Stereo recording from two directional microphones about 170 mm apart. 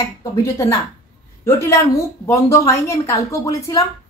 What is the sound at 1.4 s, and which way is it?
A woman's voice, 15° left (ahead or behind).